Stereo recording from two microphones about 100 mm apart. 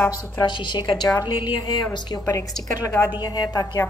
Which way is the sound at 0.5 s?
50° left (ahead or behind).